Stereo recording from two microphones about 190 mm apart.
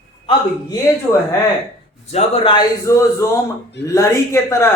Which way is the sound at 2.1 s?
30° left (ahead or behind).